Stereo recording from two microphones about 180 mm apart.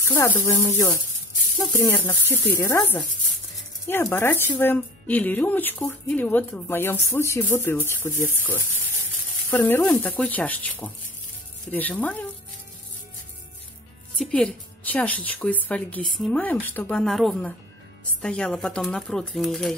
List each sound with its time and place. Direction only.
0.1 s speech: 15° left (ahead or behind)
14.1 s speech: 5° left (ahead or behind)